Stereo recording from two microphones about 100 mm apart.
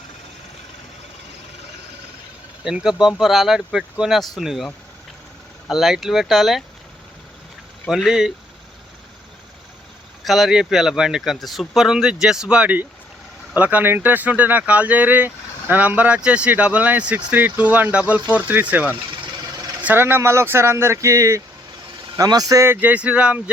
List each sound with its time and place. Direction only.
2.6 s speech: 5° right (ahead or behind)
7.9 s speech: centre (ahead or behind)
10.2 s speech: centre (ahead or behind); by 22.6 s 40° right (ahead or behind)
22.6 s speech: 20° right (ahead or behind)